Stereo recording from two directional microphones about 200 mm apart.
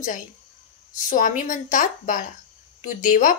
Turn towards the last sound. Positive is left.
turn(degrees=40)  # may be behind; listen again after turning